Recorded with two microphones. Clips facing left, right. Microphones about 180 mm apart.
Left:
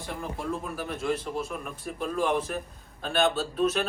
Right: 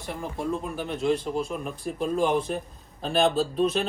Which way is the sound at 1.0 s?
30° right (ahead or behind).